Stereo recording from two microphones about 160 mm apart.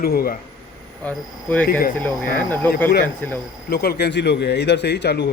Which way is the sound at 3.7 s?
80° left.